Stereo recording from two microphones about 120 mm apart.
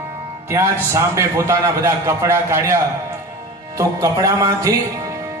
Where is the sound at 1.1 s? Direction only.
25° right (ahead or behind).